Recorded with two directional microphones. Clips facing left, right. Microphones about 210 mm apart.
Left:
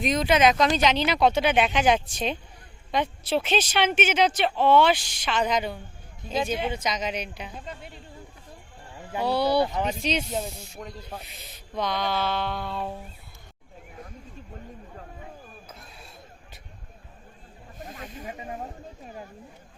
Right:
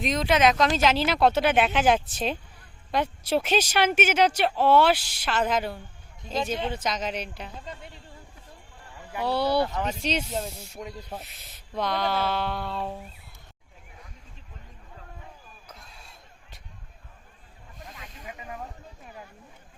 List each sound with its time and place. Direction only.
0.0 s speech: centre (ahead or behind)
6.3 s speech: 5° left (ahead or behind)
6.7 s speech: centre (ahead or behind)
9.2 s speech: centre (ahead or behind)
9.6 s speech: 15° left (ahead or behind)
10.6 s speech: 10° right (ahead or behind)
15.7 s a sound: 5° left (ahead or behind)
17.8 s snake: 45° left (ahead or behind); by 18.7 s 30° left (ahead or behind)